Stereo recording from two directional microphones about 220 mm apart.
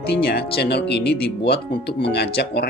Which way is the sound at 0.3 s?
45° left (ahead or behind).